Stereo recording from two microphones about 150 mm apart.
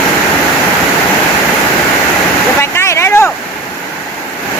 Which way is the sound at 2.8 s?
15° left (ahead or behind).